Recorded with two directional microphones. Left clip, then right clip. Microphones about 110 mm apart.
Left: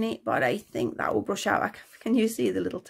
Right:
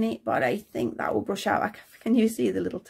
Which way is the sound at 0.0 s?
20° left (ahead or behind).